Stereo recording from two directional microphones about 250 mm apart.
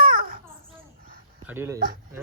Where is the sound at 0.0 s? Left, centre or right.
Right.